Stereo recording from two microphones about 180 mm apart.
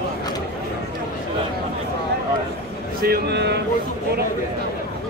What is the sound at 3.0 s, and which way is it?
Speech, 65° right (ahead or behind).